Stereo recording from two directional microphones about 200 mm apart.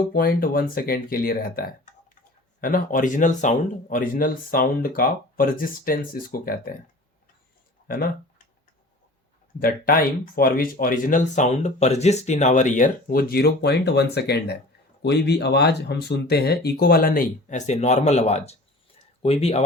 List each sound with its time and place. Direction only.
0.1 s speech: 45° left (ahead or behind)
9.6 s speech: 45° left (ahead or behind); by 19.6 s 30° left (ahead or behind)